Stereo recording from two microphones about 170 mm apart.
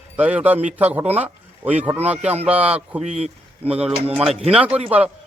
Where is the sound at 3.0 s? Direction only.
40° right (ahead or behind).